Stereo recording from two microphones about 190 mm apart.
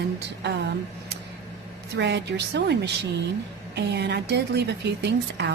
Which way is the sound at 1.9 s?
65° right (ahead or behind).